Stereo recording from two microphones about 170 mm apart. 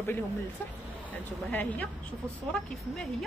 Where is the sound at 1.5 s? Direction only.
10° left (ahead or behind).